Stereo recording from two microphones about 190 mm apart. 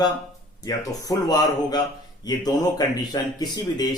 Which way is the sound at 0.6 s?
20° left (ahead or behind).